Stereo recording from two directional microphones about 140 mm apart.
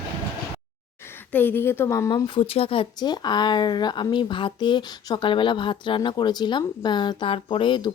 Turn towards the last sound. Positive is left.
turn(degrees=35)  # may be behind; listen again after turning